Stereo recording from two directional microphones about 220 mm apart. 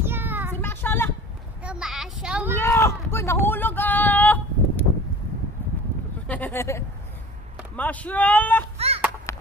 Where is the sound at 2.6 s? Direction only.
10° left (ahead or behind).